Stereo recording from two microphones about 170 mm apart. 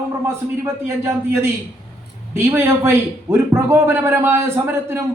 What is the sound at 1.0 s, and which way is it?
A man's voice, 15° right (ahead or behind).